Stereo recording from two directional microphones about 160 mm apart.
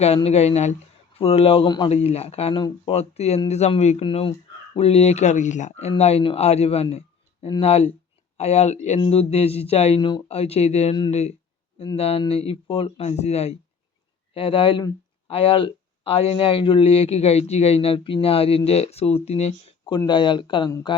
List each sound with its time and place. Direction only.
0.0 s speech: 40° left (ahead or behind)
1.9 s speech: 40° left (ahead or behind)
20.1 s speech: 30° left (ahead or behind)